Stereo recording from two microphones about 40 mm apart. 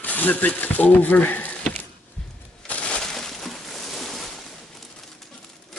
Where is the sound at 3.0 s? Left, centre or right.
Centre.